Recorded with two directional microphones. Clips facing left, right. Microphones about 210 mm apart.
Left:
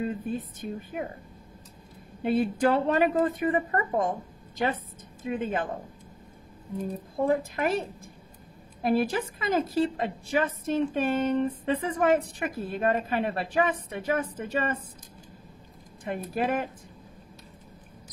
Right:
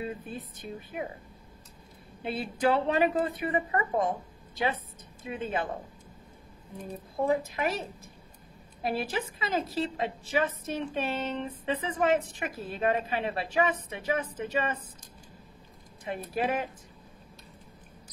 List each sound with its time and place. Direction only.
0.0 s a woman's voice: 45° left (ahead or behind)
2.2 s a woman's voice: 45° left (ahead or behind)
5.2 s a woman's voice: 45° left (ahead or behind)
7.2 s a woman's voice: 50° left (ahead or behind)
16.0 s a woman's voice: 50° left (ahead or behind)